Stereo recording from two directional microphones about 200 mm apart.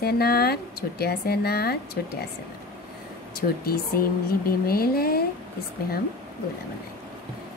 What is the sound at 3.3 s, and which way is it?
A woman's voice, 50° left (ahead or behind).